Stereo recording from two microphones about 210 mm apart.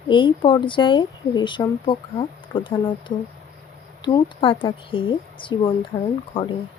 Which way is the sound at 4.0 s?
20° left (ahead or behind).